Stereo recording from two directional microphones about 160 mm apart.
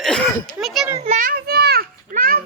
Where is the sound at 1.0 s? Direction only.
40° right (ahead or behind).